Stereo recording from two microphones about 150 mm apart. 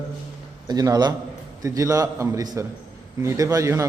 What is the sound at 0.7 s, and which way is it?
A man's voice, 25° right (ahead or behind).